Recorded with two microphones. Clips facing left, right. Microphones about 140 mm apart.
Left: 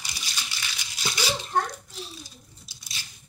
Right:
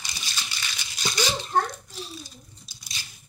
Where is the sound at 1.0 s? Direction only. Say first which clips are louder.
Right 3 dB; 5° left (ahead or behind).